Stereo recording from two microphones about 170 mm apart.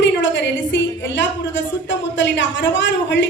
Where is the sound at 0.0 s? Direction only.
90° left.